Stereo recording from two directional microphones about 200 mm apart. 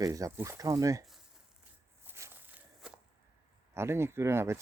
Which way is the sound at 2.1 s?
10° right (ahead or behind).